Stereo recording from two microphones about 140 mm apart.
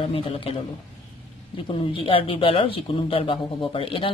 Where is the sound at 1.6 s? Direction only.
40° left (ahead or behind).